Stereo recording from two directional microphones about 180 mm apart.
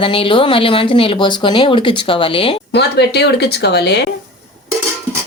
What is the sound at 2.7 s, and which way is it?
Speech, 65° left (ahead or behind).